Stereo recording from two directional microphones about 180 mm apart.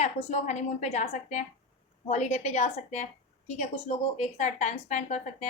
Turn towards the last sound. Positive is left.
turn(degrees=40)  # may be behind; listen again after turning